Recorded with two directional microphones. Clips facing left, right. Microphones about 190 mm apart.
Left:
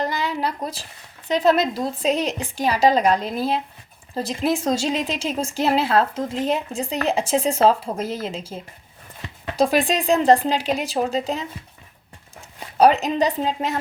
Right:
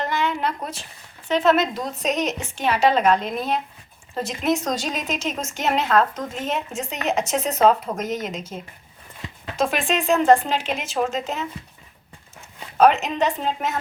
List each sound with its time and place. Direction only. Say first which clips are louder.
0.0 s a sound: even; 35° left (ahead or behind)
1.3 s a woman's voice: left 1 dB; 35° left (ahead or behind)
12.7 s a woman's voice: left 1 dB; 35° left (ahead or behind)